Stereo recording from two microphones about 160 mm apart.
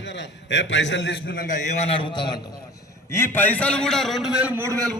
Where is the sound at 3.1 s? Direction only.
15° left (ahead or behind); by 4.9 s 20° right (ahead or behind).